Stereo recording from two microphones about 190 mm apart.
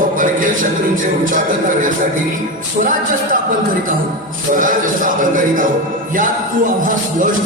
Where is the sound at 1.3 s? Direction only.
45° right (ahead or behind).